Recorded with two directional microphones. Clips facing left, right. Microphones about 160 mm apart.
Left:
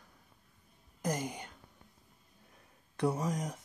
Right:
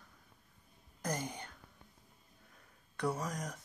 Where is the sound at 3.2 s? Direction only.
10° left (ahead or behind).